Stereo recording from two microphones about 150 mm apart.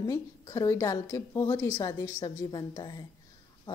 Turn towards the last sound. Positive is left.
turn(degrees=25)  # may be behind; listen again after turning